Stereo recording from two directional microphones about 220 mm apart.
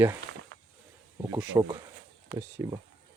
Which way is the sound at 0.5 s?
50° right (ahead or behind).